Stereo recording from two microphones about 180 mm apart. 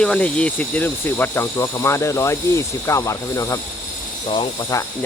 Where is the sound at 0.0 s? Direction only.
5° left (ahead or behind).